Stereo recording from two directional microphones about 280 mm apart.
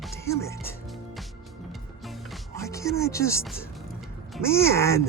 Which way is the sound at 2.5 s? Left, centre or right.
Centre.